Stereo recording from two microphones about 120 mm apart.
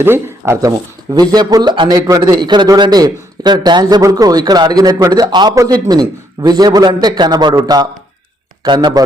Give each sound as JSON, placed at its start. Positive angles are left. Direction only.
{"t": 0.0, "sound": "speech", "side_deg": -20}
{"t": 1.1, "sound": "a man's voice", "side_deg": -35}